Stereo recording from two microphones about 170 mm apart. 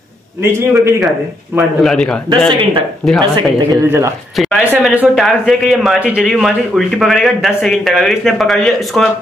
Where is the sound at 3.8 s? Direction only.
15° right (ahead or behind).